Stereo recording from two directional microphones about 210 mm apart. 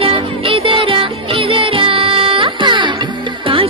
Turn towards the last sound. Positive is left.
turn(degrees=-25)  # may be behind; listen again after turning